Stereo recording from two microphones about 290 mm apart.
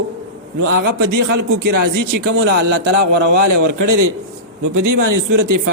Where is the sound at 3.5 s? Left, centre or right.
Right.